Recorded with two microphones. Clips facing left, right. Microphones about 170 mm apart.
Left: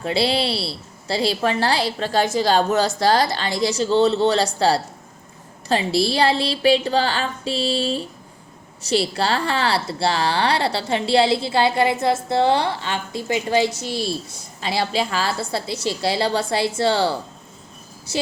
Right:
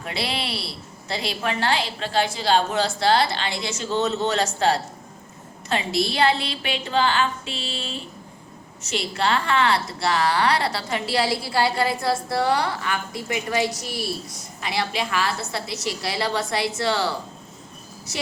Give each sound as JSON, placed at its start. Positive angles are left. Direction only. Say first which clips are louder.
{"t": 0.0, "sound": "a woman's voice", "louder": "left 8 dB", "side_deg": 30}
{"t": 5.6, "sound": "a woman's voice", "louder": "left 4 dB", "side_deg": 35}